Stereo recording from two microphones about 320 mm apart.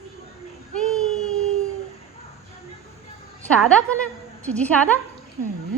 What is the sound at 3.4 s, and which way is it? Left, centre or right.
A woman's voice, centre.